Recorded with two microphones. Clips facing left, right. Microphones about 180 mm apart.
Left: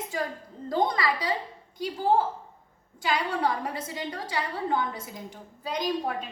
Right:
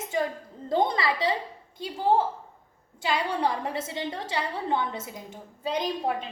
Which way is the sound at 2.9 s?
25° right (ahead or behind).